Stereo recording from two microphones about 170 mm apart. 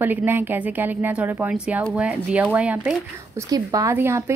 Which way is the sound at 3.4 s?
20° right (ahead or behind).